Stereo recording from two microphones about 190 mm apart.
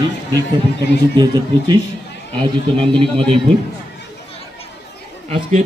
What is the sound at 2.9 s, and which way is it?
Speech, 25° right (ahead or behind).